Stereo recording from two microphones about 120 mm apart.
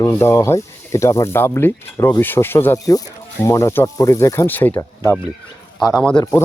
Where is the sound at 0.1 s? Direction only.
20° left (ahead or behind).